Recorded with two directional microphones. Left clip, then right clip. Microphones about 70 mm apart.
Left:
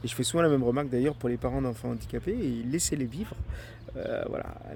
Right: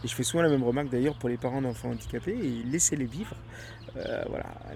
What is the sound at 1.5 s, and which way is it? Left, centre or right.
Speech, left.